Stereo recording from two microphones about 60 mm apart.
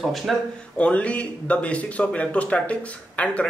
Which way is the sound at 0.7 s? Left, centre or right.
Left.